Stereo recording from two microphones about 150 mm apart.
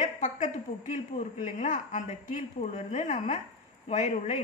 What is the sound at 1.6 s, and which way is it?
A woman's voice, 60° left (ahead or behind).